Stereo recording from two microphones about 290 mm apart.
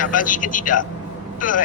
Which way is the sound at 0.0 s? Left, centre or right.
Left.